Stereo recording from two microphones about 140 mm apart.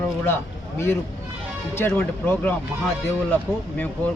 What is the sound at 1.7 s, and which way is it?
Speech, 15° left (ahead or behind).